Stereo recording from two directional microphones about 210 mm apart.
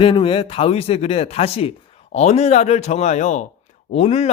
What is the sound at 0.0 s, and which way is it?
Speech, 25° left (ahead or behind).